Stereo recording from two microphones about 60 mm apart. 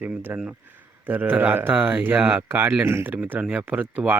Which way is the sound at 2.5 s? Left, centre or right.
Right.